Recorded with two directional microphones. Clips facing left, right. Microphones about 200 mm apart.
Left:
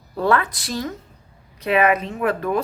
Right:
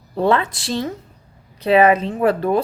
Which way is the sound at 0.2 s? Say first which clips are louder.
Right 2 dB; 25° right (ahead or behind).